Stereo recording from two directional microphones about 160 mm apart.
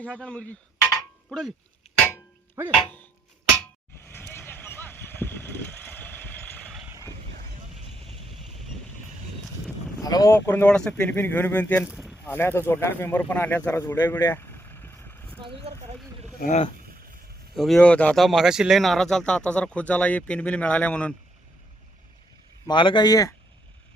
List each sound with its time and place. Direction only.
0.0 s speech: 5° left (ahead or behind)
4.0 s vehicle: 15° left (ahead or behind)
10.0 s speech: 25° left (ahead or behind)
11.9 s a sound: 5° right (ahead or behind)
12.2 s speech: 15° left (ahead or behind)
13.7 s vehicle: 15° left (ahead or behind)
15.4 s a sound: 35° right (ahead or behind)
16.4 s speech: 50° left (ahead or behind)
17.5 s speech: centre (ahead or behind)
22.6 s a man's voice: 30° left (ahead or behind)